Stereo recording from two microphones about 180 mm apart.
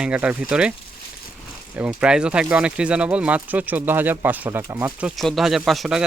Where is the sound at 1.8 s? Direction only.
5° right (ahead or behind).